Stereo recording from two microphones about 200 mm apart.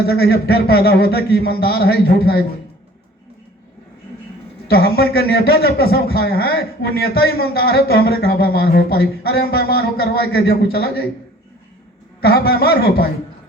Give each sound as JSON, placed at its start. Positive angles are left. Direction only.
{"t": 0.1, "sound": "a man's voice", "side_deg": 50}
{"t": 4.7, "sound": "a man's voice", "side_deg": 50}
{"t": 12.2, "sound": "a man's voice", "side_deg": 50}